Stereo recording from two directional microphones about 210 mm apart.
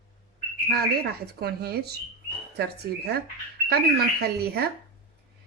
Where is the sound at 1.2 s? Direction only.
50° right (ahead or behind).